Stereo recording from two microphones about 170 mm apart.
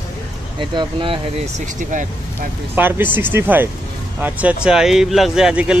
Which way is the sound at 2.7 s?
10° right (ahead or behind).